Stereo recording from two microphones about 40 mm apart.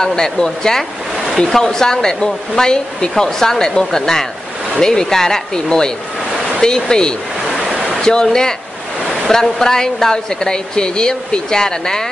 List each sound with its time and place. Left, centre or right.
0.0 s speech: centre
7.5 s a sound: centre
8.0 s speech: centre